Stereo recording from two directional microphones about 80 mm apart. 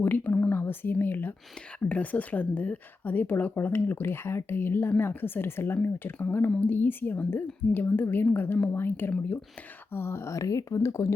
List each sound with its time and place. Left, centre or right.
0.0 s a woman's voice: left